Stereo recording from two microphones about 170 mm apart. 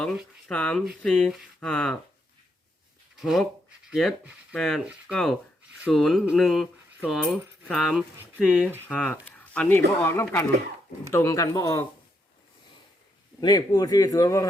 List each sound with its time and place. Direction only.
0.4 s speech: 10° left (ahead or behind)
3.2 s a man's voice: 5° right (ahead or behind); by 11.9 s 20° left (ahead or behind)
13.4 s a man's voice: 25° left (ahead or behind)